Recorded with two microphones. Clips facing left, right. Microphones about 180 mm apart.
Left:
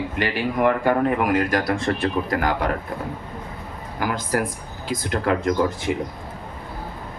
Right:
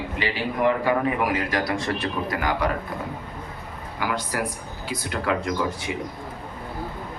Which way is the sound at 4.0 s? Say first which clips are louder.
Left 3 dB; 45° left (ahead or behind).